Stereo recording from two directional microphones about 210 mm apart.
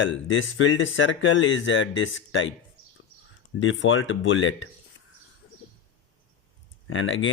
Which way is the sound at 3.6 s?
65° left (ahead or behind).